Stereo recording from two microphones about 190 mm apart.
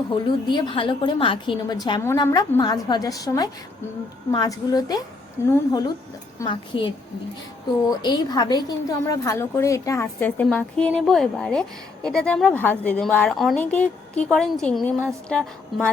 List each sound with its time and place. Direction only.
0.1 s a woman's voice: 25° left (ahead or behind)
6.4 s a woman's voice: 25° left (ahead or behind); by 15.9 s 5° left (ahead or behind)